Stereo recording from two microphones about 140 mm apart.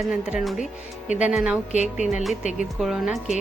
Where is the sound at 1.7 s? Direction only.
60° left (ahead or behind).